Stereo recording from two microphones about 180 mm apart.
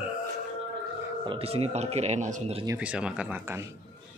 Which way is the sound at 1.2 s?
30° right (ahead or behind).